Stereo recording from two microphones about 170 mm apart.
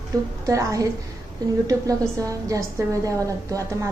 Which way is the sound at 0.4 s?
20° right (ahead or behind).